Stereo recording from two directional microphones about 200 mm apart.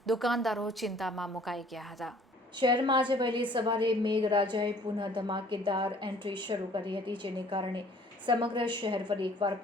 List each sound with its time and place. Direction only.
0.0 s a woman's voice: centre (ahead or behind)
2.6 s a woman's voice: 25° right (ahead or behind)